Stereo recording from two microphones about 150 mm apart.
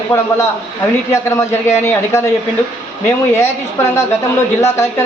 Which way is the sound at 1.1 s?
20° left (ahead or behind).